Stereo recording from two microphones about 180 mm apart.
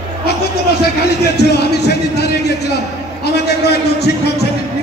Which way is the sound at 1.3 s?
65° left (ahead or behind).